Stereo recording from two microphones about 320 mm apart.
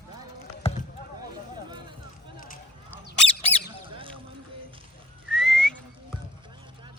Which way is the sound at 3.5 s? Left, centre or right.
Centre.